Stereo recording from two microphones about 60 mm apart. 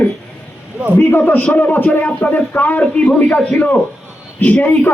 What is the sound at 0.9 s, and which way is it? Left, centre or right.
A man's voice, left.